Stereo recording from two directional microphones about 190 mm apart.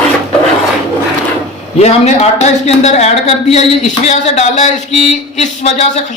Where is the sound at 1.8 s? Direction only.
35° left (ahead or behind).